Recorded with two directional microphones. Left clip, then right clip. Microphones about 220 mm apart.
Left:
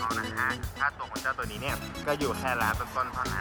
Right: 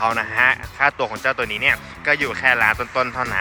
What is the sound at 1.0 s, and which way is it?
Speech, centre (ahead or behind).